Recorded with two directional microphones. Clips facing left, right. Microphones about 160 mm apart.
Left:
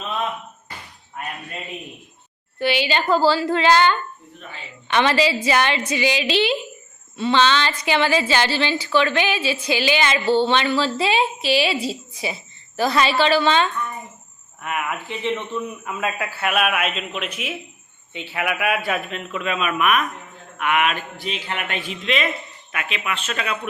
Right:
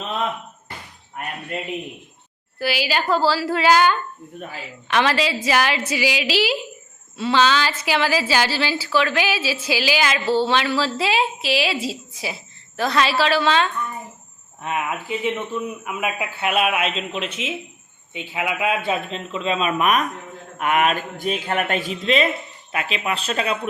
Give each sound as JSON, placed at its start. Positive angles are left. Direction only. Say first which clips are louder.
{"t": 2.6, "sound": "a woman's voice", "louder": "left 2 dB", "side_deg": -5}
{"t": 14.6, "sound": "a man's voice", "louder": "right 1 dB", "side_deg": -25}
{"t": 15.0, "sound": "a man's voice", "louder": "right 1 dB", "side_deg": -10}